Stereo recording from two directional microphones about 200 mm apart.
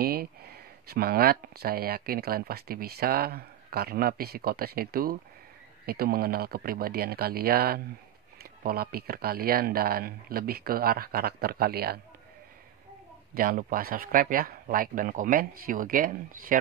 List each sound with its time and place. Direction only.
0.0 s speech: 50° right (ahead or behind)
13.3 s speech: 45° right (ahead or behind)